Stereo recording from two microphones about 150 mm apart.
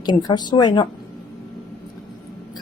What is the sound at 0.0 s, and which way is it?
Speech, 30° left (ahead or behind).